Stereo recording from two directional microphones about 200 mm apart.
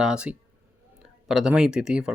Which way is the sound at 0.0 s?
5° right (ahead or behind).